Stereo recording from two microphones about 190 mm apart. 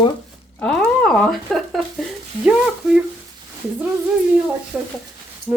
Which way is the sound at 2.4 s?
5° right (ahead or behind).